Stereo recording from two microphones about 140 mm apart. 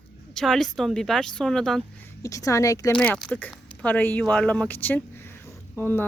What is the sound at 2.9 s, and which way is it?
Speech, 10° left (ahead or behind).